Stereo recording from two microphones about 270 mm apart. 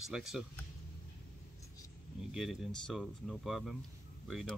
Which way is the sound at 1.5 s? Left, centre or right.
Centre.